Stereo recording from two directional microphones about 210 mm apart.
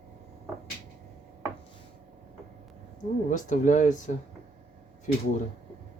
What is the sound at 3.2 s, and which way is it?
Speech, 35° left (ahead or behind).